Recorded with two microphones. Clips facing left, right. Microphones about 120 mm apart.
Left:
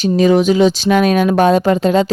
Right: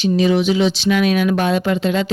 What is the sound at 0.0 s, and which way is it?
Speech, 45° left (ahead or behind).